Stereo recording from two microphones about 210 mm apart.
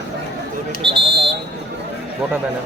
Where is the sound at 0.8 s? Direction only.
25° right (ahead or behind).